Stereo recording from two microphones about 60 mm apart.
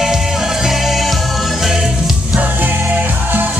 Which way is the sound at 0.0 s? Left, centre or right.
Centre.